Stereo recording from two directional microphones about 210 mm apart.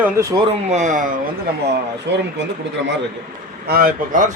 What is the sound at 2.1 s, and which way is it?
Speech, 55° right (ahead or behind).